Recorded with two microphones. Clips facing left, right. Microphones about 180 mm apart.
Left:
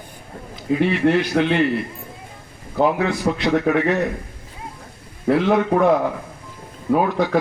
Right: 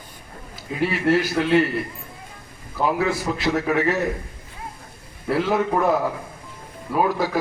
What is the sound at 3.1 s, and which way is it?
Speech, 5° right (ahead or behind).